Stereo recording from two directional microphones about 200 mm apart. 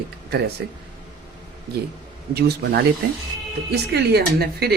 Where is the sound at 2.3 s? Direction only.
55° right (ahead or behind).